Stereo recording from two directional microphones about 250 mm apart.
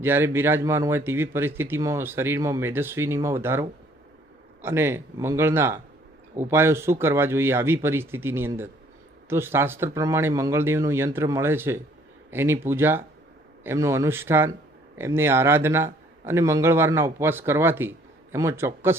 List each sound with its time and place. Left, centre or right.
0.0 s a man's voice: centre